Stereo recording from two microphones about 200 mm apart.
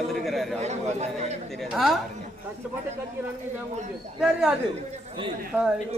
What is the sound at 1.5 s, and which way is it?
Speech, centre (ahead or behind).